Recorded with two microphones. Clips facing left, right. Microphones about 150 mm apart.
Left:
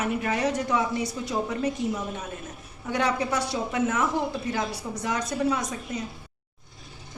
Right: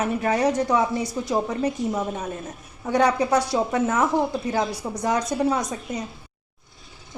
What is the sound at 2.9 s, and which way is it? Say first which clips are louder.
A woman's voice: right 6 dB; 40° right (ahead or behind).